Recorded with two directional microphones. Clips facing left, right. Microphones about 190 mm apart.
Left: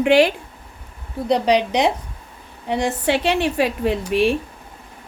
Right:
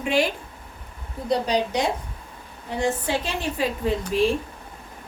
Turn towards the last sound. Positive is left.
turn(degrees=70)  # may be behind; listen again after turning